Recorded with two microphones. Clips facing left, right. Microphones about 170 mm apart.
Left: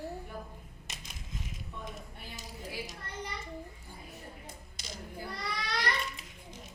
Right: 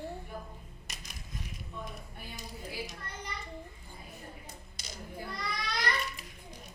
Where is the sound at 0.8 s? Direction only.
25° left (ahead or behind).